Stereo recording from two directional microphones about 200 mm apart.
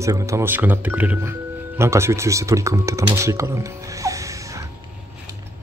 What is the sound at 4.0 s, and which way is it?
Music, 15° right (ahead or behind).